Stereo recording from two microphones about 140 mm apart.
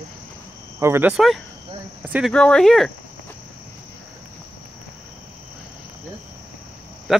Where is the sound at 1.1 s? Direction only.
Centre (ahead or behind).